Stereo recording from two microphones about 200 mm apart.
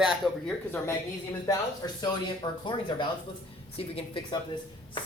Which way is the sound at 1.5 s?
20° left (ahead or behind).